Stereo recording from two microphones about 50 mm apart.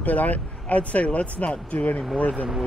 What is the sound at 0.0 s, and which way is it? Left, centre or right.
Speech, left.